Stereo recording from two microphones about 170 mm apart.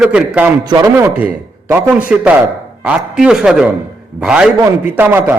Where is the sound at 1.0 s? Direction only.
15° right (ahead or behind).